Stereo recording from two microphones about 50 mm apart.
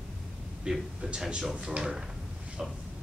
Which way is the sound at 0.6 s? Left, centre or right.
Centre.